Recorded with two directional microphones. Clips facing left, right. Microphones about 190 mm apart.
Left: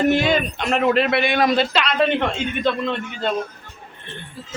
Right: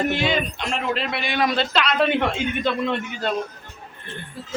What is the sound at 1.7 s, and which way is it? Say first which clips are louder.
Speech: left 1 dB; 5° right (ahead or behind).